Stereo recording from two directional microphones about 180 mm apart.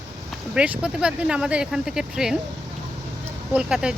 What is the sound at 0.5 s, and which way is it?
Speech, 5° right (ahead or behind).